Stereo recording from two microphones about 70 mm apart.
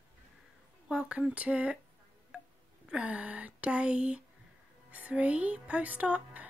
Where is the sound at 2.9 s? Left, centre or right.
Centre.